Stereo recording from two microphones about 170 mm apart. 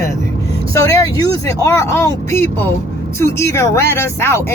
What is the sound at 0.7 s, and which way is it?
Speech, 20° left (ahead or behind).